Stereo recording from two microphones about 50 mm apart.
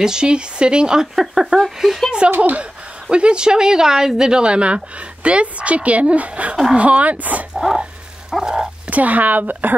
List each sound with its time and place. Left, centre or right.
0.0 s speech: centre
2.3 s speech: right
3.1 s speech: right
6.5 s speech: centre
6.8 s speech: right
7.5 s a sound: centre
8.3 s dog: centre
8.9 s speech: right